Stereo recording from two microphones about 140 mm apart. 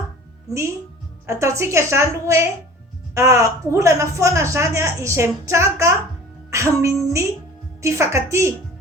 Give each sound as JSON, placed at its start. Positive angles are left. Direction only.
{"t": 1.3, "sound": "a woman's voice", "side_deg": -20}
{"t": 6.5, "sound": "music", "side_deg": -20}
{"t": 7.8, "sound": "a woman's voice", "side_deg": -20}